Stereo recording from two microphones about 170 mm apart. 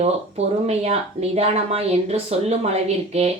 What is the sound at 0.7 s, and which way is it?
Speech, 40° right (ahead or behind).